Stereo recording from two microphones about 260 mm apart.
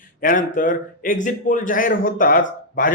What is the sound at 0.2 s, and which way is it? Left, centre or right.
A man's voice, left.